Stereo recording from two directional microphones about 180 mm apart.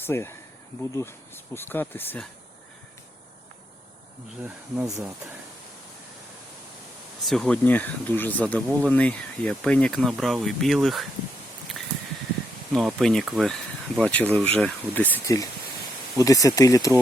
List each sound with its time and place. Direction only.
0.0 s speech: 15° left (ahead or behind)
7.3 s speech: 5° left (ahead or behind)
11.8 s a sound: centre (ahead or behind)
12.7 s speech: centre (ahead or behind); by 17.0 s 20° left (ahead or behind)